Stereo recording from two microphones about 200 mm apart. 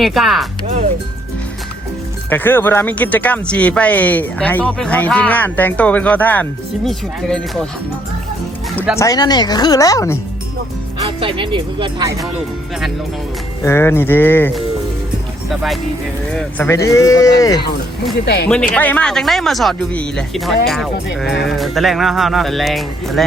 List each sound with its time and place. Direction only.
0.0 s speech: centre (ahead or behind)
2.3 s speech: 10° left (ahead or behind)
9.0 s speech: 20° left (ahead or behind)
11.0 s speech: 25° right (ahead or behind)
13.7 s speech: 10° left (ahead or behind)
15.4 s speech: centre (ahead or behind); by 17.6 s 15° left (ahead or behind)
18.4 s speech: 5° left (ahead or behind)